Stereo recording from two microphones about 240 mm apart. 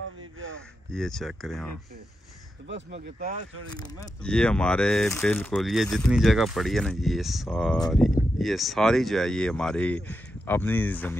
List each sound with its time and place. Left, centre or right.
0.2 s gasp: right
0.6 s speech: centre
2.7 s speech: right
4.0 s speech: centre